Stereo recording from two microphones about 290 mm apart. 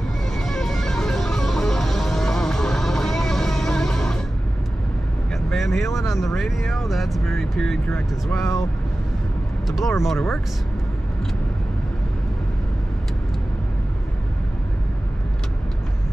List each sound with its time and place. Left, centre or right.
0.3 s music: centre
5.3 s vehicle: centre
6.2 s speech: centre
9.7 s speech: centre